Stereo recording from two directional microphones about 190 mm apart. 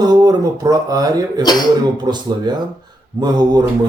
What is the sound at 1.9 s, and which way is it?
Speech, 20° right (ahead or behind).